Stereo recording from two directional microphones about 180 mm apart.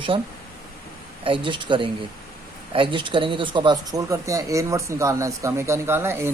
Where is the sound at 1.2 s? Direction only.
30° right (ahead or behind).